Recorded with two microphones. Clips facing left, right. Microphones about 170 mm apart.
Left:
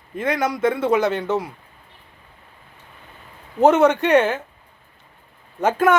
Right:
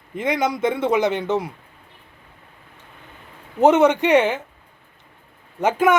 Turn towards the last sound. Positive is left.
turn(degrees=-15)  # may be behind; listen again after turning